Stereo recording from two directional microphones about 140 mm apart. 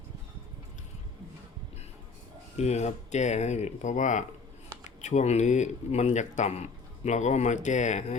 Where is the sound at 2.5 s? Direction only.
50° left (ahead or behind).